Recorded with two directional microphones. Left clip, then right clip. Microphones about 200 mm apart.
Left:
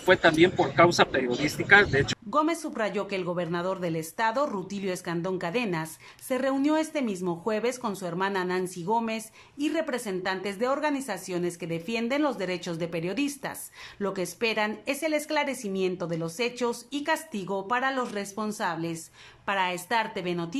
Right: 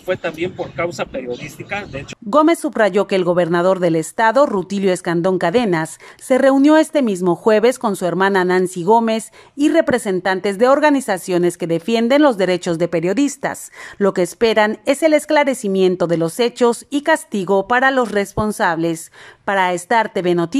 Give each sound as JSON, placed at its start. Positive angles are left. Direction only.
{"t": 0.0, "sound": "speech", "side_deg": 0}
{"t": 2.2, "sound": "speech", "side_deg": -40}